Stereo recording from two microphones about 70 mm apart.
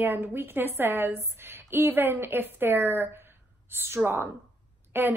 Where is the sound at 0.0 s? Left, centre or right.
Right.